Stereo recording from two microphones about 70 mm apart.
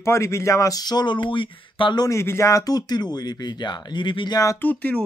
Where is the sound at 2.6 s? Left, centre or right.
Left.